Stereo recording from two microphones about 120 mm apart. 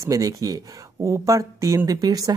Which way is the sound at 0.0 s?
30° right (ahead or behind).